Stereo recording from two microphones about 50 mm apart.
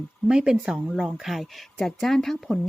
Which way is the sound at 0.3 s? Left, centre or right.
Centre.